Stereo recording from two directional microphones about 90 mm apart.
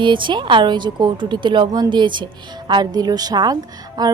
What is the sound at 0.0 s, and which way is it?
A woman's voice, 65° right (ahead or behind).